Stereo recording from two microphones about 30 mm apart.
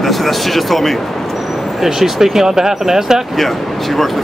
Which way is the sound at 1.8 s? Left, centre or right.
Centre.